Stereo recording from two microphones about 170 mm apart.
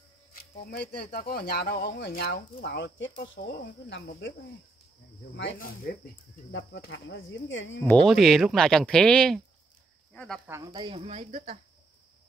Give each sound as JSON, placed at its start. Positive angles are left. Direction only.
{"t": 0.3, "sound": "a sound", "side_deg": 70}
{"t": 1.0, "sound": "speech", "side_deg": 60}
{"t": 5.3, "sound": "speech", "side_deg": 90}
{"t": 6.5, "sound": "speech", "side_deg": 90}
{"t": 7.8, "sound": "speech", "side_deg": 5}
{"t": 10.7, "sound": "speech", "side_deg": -30}